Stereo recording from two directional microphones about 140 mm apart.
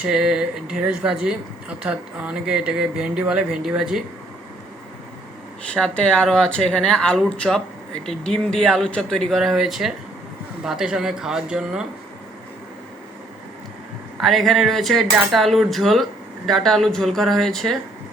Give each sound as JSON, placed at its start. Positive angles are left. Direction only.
{"t": 0.0, "sound": "speech", "side_deg": -5}
{"t": 5.7, "sound": "speech", "side_deg": 5}
{"t": 14.2, "sound": "speech", "side_deg": 0}